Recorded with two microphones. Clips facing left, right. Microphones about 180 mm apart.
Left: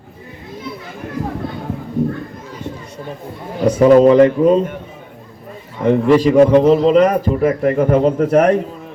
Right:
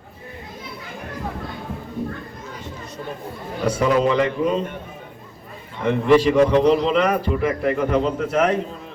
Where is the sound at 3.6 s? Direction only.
45° left (ahead or behind).